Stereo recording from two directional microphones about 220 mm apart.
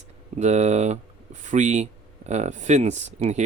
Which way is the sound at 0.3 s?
30° right (ahead or behind).